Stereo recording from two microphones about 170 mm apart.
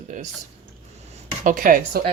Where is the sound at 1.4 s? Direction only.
55° right (ahead or behind).